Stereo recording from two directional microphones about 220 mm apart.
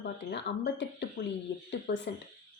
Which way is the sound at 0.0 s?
50° left (ahead or behind).